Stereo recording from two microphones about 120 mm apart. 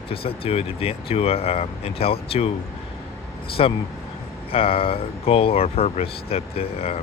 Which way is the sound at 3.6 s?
55° left (ahead or behind).